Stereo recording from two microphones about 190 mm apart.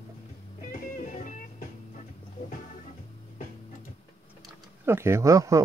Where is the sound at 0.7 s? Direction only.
40° left (ahead or behind).